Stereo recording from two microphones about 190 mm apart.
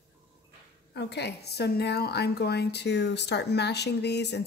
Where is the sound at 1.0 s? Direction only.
60° left (ahead or behind).